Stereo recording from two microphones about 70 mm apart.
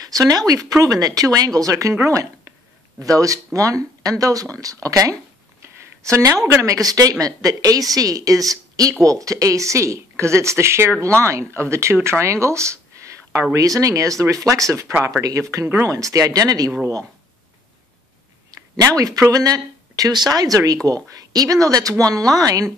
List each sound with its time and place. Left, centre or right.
0.1 s speech: right
3.1 s speech: right
18.9 s speech: right
20.1 s speech: right